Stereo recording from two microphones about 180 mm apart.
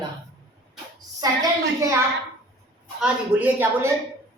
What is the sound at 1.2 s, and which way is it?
Speech, 20° right (ahead or behind).